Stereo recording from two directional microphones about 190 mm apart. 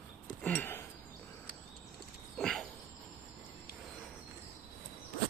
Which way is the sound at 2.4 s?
Centre (ahead or behind).